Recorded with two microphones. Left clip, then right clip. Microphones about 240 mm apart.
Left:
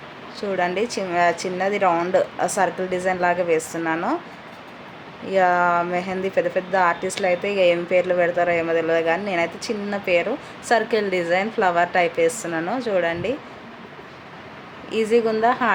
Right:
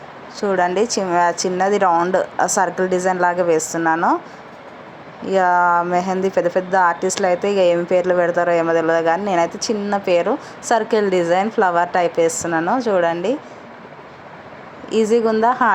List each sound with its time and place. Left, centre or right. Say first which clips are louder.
0.3 s a woman's voice: right 5 dB; centre
5.3 s a woman's voice: right 3 dB; centre
14.8 s a woman's voice: right 3 dB; centre